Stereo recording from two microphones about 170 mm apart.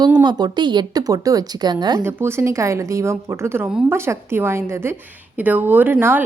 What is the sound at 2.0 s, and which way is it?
A woman's voice, 10° right (ahead or behind).